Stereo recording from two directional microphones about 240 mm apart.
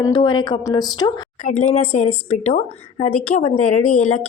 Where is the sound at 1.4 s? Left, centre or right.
Left.